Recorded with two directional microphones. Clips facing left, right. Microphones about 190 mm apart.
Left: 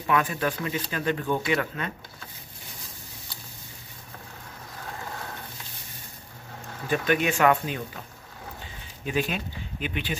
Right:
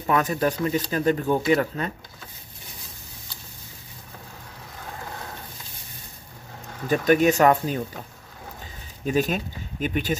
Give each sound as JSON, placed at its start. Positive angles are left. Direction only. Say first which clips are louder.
{"t": 0.0, "sound": "speech", "louder": "right 3 dB", "side_deg": -40}
{"t": 6.9, "sound": "speech", "louder": "right 6 dB", "side_deg": -40}
{"t": 9.0, "sound": "speech", "louder": "right 5 dB", "side_deg": -40}